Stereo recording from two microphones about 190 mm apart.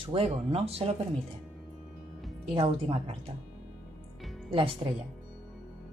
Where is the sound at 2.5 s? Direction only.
25° right (ahead or behind).